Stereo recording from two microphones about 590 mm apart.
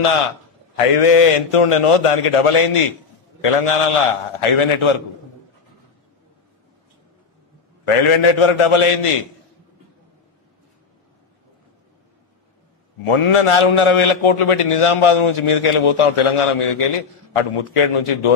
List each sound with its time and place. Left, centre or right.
0.8 s a man's voice: left
7.8 s a man's voice: left
13.0 s a man's voice: left